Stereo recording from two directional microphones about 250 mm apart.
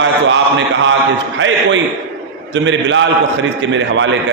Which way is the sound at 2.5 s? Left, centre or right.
Right.